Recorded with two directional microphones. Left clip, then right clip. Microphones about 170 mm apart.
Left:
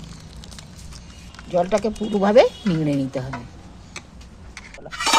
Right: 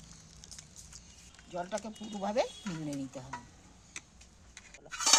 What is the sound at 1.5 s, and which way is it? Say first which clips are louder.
Speech: left 18 dB; 45° left (ahead or behind).